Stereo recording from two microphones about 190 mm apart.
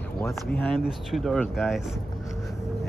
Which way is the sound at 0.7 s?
Centre (ahead or behind).